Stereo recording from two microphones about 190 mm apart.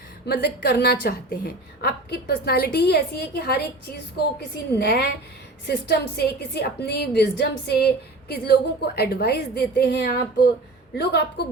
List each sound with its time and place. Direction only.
0.3 s a woman's voice: 60° left (ahead or behind)